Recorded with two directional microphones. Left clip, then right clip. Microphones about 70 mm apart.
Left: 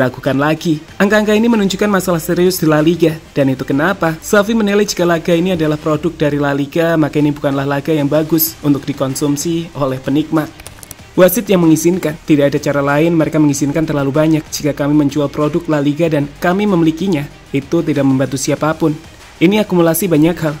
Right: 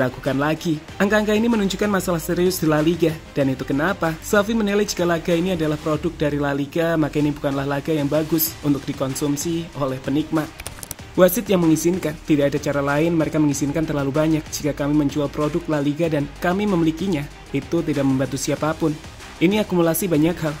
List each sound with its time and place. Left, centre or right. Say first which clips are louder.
0.0 s speech: left 7 dB; left